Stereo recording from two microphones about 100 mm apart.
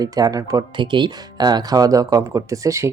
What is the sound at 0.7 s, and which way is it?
Speech, 50° right (ahead or behind).